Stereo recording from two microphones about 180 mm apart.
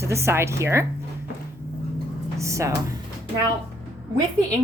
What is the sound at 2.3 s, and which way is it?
Speech, 15° right (ahead or behind).